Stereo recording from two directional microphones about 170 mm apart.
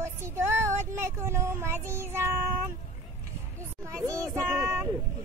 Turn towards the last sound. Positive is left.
turn(degrees=-15)  # may be behind; listen again after turning